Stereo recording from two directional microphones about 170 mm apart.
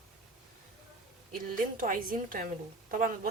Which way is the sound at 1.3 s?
55° right (ahead or behind).